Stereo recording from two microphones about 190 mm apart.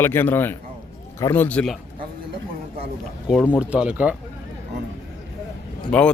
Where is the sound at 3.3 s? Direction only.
Centre (ahead or behind).